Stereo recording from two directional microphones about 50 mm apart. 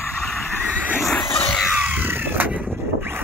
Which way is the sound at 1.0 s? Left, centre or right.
Centre.